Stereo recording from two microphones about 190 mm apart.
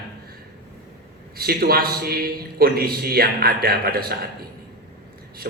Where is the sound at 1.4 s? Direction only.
55° right (ahead or behind).